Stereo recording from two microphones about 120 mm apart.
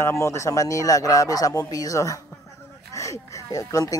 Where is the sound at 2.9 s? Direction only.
25° left (ahead or behind).